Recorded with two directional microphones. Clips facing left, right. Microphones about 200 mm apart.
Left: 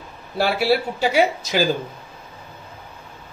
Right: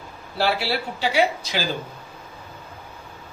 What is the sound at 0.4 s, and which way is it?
Speech, 50° left (ahead or behind).